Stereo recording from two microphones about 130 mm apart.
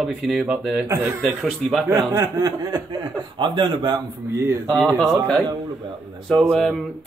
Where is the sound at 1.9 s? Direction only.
20° right (ahead or behind).